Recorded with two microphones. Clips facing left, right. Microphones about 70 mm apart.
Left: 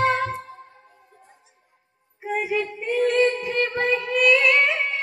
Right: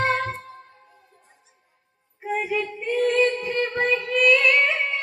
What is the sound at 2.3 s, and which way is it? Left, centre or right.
Female singing, centre.